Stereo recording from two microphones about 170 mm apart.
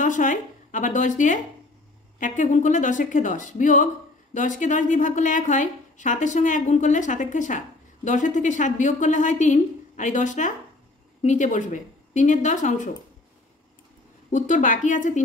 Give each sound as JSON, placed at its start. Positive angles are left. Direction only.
{"t": 0.0, "sound": "speech", "side_deg": 45}
{"t": 14.3, "sound": "speech", "side_deg": 50}